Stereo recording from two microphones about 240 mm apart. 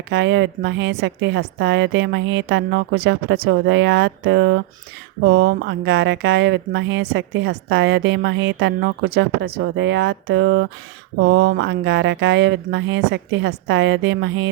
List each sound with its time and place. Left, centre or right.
0.1 s speech: right